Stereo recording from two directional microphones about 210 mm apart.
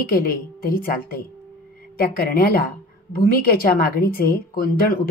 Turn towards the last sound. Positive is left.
turn(degrees=45)  # may be behind; listen again after turning